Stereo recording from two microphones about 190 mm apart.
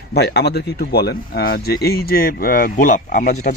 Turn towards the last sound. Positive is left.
turn(degrees=45)  # may be behind; listen again after turning